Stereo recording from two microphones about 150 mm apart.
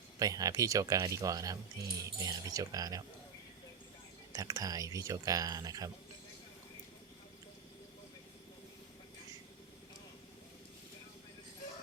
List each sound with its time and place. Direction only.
0.2 s speech: 25° right (ahead or behind)
4.3 s speech: 25° right (ahead or behind)